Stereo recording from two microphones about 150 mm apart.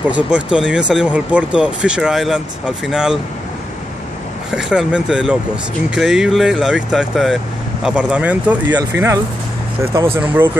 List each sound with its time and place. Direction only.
0.1 s speech: 5° right (ahead or behind)
4.6 s speech: 5° right (ahead or behind)